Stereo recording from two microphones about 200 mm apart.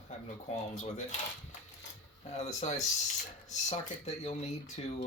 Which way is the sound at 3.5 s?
35° left (ahead or behind).